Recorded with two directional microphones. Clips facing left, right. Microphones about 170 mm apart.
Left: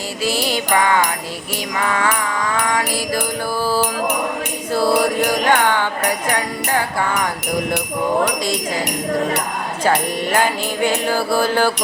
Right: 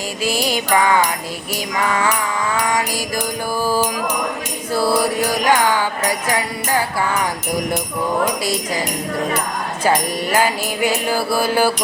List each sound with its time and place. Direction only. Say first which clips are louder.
0.2 s music: even; 15° right (ahead or behind)
3.6 s music: even; 15° right (ahead or behind)
10.3 s music: right 1 dB; 5° right (ahead or behind)